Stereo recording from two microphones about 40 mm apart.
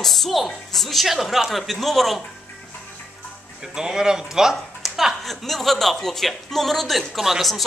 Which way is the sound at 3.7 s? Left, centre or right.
Centre.